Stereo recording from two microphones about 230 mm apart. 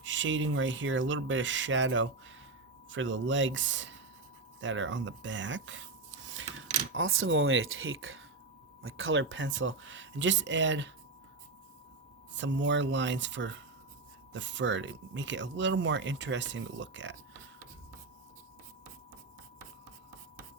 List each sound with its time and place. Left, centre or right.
0.0 s speech: right
6.9 s speech: right
12.3 s speech: right